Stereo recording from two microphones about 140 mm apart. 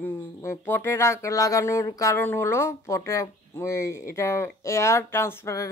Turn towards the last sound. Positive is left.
turn(degrees=20)  # may be behind; listen again after turning